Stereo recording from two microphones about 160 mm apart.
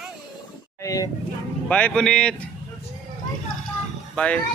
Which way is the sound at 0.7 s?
20° left (ahead or behind).